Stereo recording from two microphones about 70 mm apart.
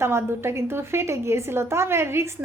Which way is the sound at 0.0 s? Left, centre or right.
Right.